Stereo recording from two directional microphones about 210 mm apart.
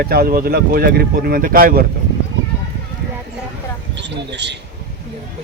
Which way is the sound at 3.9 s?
55° right (ahead or behind).